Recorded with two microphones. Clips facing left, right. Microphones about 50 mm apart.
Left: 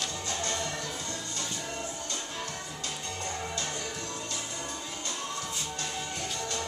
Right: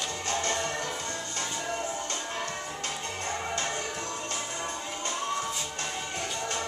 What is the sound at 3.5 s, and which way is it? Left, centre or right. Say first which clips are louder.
Music: right 4 dB; right.